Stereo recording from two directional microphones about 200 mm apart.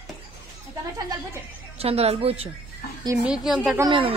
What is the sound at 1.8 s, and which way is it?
Speech, 30° right (ahead or behind).